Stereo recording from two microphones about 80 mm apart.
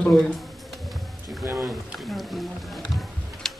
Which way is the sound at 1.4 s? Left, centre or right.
Right.